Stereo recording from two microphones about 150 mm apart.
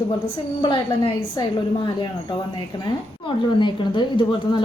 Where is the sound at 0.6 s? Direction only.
30° left (ahead or behind).